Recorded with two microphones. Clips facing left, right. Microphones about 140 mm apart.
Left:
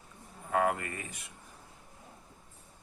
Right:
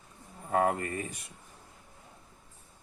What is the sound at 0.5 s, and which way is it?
Speech, 35° right (ahead or behind).